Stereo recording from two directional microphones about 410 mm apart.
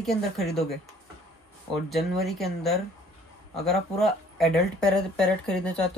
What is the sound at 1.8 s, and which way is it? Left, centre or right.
Speech, centre.